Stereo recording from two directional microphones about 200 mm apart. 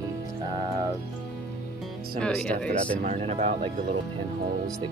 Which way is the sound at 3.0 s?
35° right (ahead or behind).